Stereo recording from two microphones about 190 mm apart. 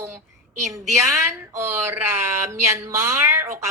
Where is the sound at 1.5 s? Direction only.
10° right (ahead or behind).